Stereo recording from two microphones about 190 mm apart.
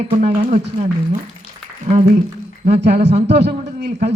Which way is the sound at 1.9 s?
30° right (ahead or behind).